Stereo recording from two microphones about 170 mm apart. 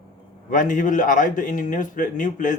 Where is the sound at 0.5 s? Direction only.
50° left (ahead or behind).